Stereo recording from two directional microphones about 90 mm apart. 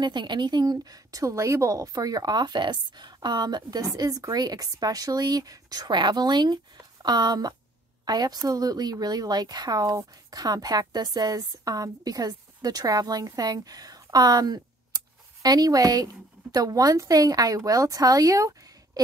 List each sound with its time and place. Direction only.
0.0 s a woman's voice: 55° right (ahead or behind); by 18.5 s 40° right (ahead or behind)